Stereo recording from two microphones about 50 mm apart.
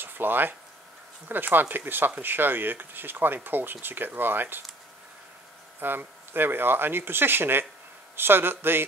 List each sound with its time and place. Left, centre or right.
0.0 s speech: right
5.8 s speech: right